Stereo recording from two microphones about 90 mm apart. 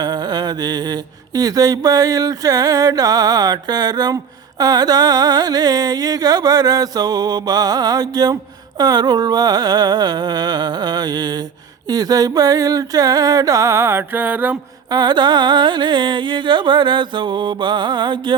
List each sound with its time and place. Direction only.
0.0 s a sound: 50° right (ahead or behind)
1.4 s music: 45° right (ahead or behind); by 14.6 s 20° right (ahead or behind)
14.8 s music: 55° right (ahead or behind)